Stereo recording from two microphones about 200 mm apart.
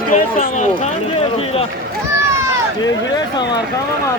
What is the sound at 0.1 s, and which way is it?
Speech, 40° left (ahead or behind).